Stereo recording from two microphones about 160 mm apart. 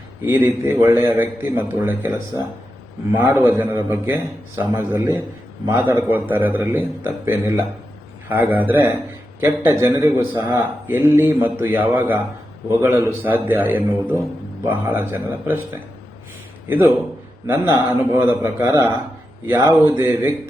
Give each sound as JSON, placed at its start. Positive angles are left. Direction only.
{"t": 0.2, "sound": "a man's voice", "side_deg": -15}
{"t": 16.6, "sound": "a man's voice", "side_deg": -10}